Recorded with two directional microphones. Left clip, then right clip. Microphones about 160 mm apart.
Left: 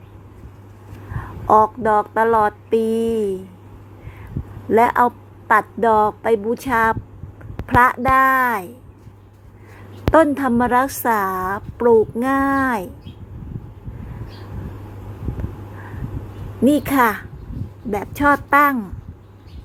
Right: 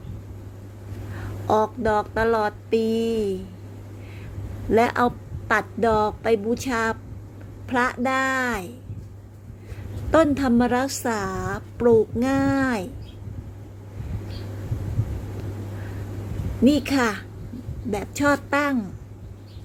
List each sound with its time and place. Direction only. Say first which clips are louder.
1.5 s a woman's voice: left 7 dB; 20° left (ahead or behind)
4.7 s a woman's voice: left 5 dB; 15° left (ahead or behind)
10.2 s a woman's voice: left 4 dB; 15° left (ahead or behind)
16.6 s a woman's voice: left 5 dB; 20° left (ahead or behind)